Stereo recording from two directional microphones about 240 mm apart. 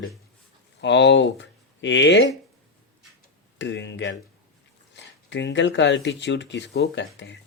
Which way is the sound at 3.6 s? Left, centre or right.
Left.